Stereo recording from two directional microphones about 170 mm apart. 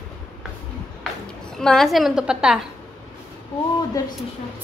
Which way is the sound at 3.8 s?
25° left (ahead or behind).